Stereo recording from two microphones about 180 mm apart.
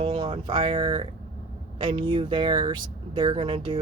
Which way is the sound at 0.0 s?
30° right (ahead or behind).